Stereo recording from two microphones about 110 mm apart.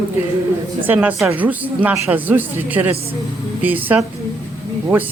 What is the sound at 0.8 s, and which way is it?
Speech, 15° right (ahead or behind).